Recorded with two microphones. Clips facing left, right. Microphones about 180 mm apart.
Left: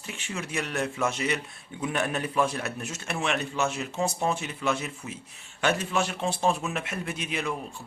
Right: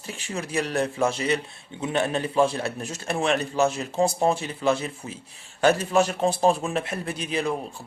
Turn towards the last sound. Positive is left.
turn(degrees=-35)  # may be behind; listen again after turning